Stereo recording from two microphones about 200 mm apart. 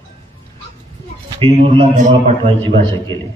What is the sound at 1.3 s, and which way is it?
A man's voice, 30° right (ahead or behind).